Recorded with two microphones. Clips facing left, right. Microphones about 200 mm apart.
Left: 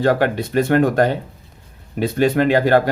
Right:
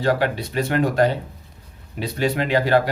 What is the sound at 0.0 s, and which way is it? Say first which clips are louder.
Speech: left 4 dB; 50° left (ahead or behind).